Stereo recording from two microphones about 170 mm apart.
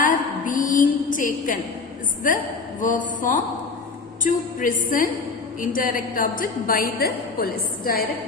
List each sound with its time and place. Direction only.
0.0 s a sound: 50° left (ahead or behind)
2.8 s music: 50° left (ahead or behind)
5.5 s a woman's voice: 55° left (ahead or behind)